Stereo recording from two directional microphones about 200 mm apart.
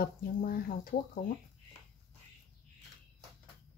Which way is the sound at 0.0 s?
45° left (ahead or behind).